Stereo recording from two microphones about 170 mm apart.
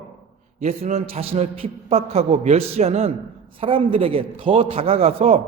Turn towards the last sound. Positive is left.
turn(degrees=-35)  # may be behind; listen again after turning